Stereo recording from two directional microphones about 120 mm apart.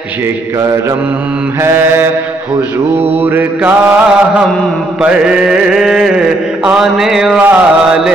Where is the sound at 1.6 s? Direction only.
20° right (ahead or behind).